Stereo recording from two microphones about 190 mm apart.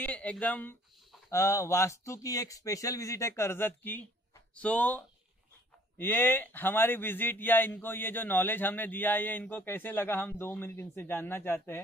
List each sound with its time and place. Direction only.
0.0 s a man's voice: 10° left (ahead or behind)